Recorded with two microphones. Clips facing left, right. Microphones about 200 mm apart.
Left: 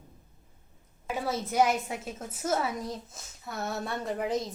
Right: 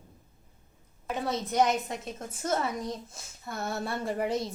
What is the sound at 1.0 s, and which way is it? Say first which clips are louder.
A woman's voice: even; 5° left (ahead or behind).